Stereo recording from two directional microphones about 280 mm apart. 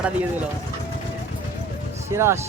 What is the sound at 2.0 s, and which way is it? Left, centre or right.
Speech, centre.